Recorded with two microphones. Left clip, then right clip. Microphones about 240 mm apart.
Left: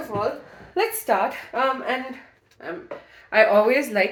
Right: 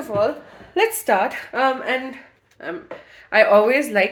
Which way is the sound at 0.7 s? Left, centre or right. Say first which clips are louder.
Right 4 dB; right.